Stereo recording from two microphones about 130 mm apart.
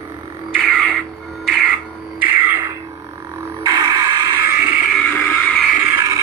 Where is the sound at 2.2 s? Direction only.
15° right (ahead or behind).